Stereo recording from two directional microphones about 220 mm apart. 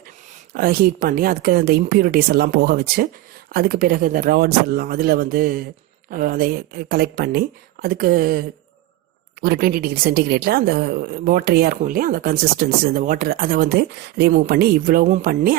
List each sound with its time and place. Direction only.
0.5 s a woman's voice: 40° right (ahead or behind)